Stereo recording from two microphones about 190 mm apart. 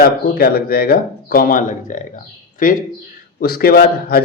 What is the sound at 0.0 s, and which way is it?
Speech, 55° left (ahead or behind).